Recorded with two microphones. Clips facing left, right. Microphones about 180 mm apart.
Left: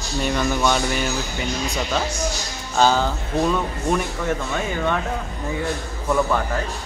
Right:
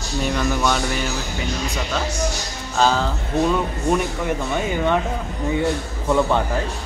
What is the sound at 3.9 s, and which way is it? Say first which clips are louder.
Speech: right 1 dB; 10° right (ahead or behind).